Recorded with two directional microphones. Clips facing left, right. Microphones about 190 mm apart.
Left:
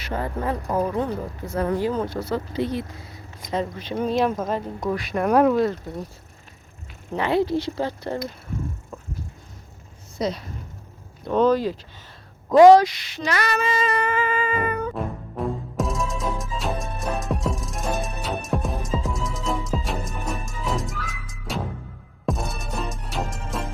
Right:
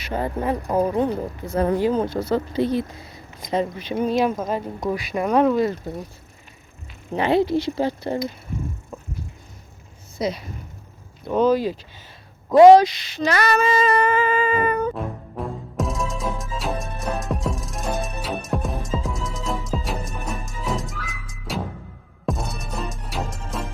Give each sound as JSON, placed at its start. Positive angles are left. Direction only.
{"t": 0.2, "sound": "speech", "side_deg": -20}
{"t": 2.6, "sound": "music", "side_deg": -35}
{"t": 3.4, "sound": "speech", "side_deg": -15}
{"t": 7.1, "sound": "speech", "side_deg": -20}
{"t": 8.9, "sound": "a sound", "side_deg": -5}
{"t": 10.2, "sound": "speech", "side_deg": -5}
{"t": 12.6, "sound": "speech", "side_deg": -20}
{"t": 13.2, "sound": "music", "side_deg": -40}
{"t": 14.9, "sound": "music", "side_deg": 0}